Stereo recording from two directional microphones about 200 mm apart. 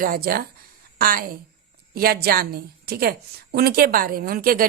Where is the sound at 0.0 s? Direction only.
50° right (ahead or behind).